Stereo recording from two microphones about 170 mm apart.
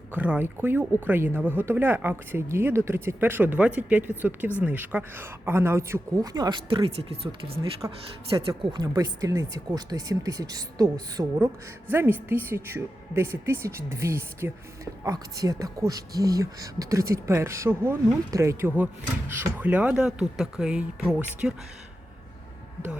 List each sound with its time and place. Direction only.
0.1 s speech: 10° right (ahead or behind); by 7.3 s 35° right (ahead or behind)
7.8 s speech: 20° right (ahead or behind)